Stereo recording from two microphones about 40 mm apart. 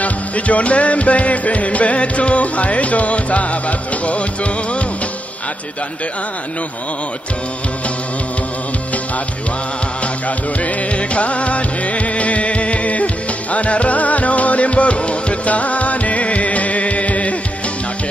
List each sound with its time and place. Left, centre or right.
0.0 s music: left
10.2 s music: left